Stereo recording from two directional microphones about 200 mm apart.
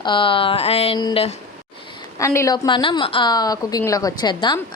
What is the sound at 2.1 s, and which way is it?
A woman's voice, 15° left (ahead or behind).